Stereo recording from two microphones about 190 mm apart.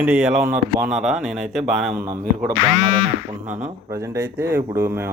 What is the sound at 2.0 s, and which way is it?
Speech, 50° right (ahead or behind).